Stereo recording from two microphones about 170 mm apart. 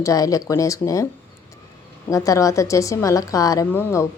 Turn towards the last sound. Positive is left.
turn(degrees=15)  # may be behind; listen again after turning